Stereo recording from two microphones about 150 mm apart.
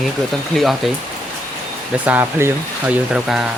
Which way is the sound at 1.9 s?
10° right (ahead or behind).